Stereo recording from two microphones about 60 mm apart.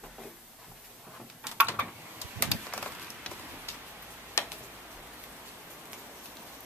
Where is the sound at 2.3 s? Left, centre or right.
Left.